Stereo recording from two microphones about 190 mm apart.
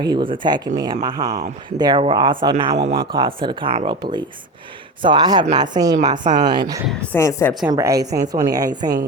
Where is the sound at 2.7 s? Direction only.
60° right (ahead or behind).